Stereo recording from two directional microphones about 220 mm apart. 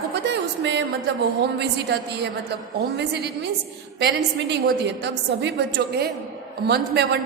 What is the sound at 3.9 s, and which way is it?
A woman's voice, 50° right (ahead or behind).